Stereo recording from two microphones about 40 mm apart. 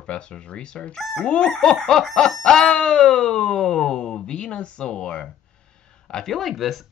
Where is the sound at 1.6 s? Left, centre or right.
Centre.